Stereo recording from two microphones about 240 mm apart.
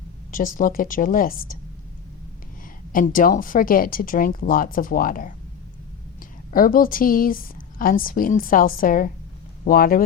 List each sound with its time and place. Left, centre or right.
0.3 s a woman's voice: left
2.9 s a woman's voice: left
6.5 s a woman's voice: left